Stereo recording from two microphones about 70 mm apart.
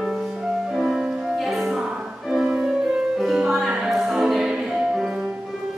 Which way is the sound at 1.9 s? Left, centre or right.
Centre.